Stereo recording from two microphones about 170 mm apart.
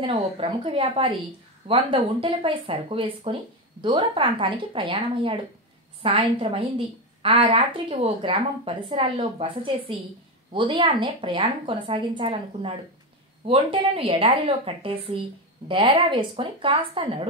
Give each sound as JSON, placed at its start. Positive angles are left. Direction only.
{"t": 0.0, "sound": "a woman's voice", "side_deg": -35}